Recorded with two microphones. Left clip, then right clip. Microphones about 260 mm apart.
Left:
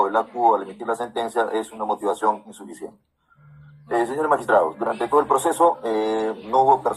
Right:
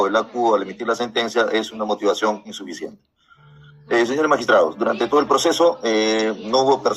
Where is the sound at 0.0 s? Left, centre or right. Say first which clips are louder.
Even; right.